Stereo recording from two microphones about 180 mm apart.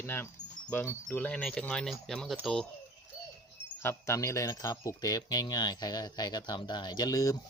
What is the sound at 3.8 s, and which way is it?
Speech, 15° left (ahead or behind).